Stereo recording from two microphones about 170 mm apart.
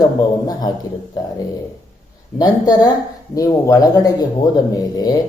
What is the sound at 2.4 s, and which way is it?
Speech, 25° left (ahead or behind).